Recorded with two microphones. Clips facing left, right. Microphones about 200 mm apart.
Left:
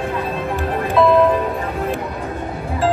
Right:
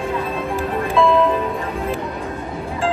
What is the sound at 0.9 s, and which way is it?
Music, 40° left (ahead or behind).